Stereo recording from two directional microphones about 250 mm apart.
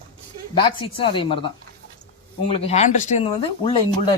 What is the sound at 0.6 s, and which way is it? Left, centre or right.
Speech, centre.